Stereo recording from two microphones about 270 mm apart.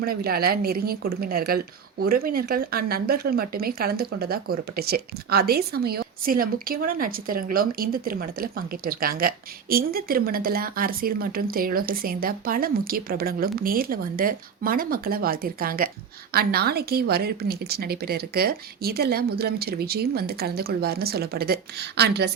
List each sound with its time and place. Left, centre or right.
0.0 s a woman's voice: right